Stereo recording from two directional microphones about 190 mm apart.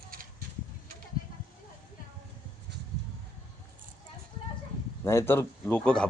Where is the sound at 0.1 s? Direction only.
50° right (ahead or behind).